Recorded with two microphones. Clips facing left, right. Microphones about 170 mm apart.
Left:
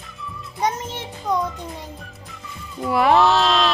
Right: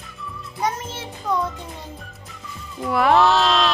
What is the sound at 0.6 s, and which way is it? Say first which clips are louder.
Music: left 2 dB; 20° left (ahead or behind).